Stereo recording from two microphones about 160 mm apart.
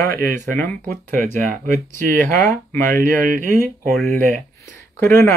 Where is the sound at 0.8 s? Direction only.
55° right (ahead or behind).